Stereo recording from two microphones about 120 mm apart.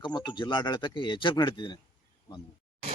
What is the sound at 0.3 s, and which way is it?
Speech, 40° left (ahead or behind).